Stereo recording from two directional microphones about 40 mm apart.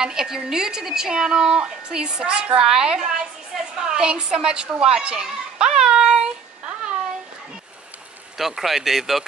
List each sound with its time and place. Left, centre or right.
0.0 s a woman's voice: centre
8.4 s speech: centre